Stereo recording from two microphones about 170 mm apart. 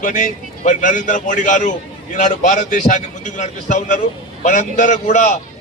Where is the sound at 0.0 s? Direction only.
50° left (ahead or behind).